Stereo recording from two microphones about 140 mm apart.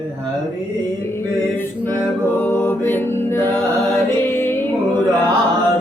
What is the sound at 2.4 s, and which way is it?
Music, 15° left (ahead or behind).